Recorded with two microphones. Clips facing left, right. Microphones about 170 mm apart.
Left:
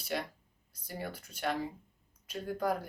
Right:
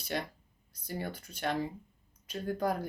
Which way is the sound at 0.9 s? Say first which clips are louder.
Right 3 dB; 5° left (ahead or behind).